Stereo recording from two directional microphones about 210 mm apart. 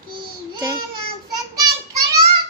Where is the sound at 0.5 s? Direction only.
20° right (ahead or behind).